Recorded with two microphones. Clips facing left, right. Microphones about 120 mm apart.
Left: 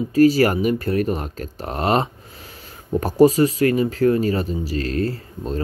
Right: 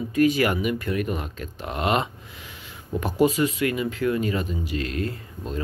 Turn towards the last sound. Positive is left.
turn(degrees=35)  # may be behind; listen again after turning